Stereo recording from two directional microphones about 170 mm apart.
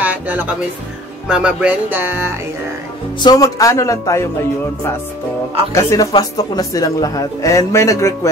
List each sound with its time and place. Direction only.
0.0 s music: 10° right (ahead or behind)
1.3 s speech: 5° right (ahead or behind)
3.2 s speech: 20° left (ahead or behind)
5.9 s speech: 20° left (ahead or behind)